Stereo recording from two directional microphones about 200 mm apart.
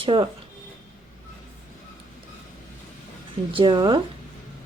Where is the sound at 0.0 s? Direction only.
25° right (ahead or behind).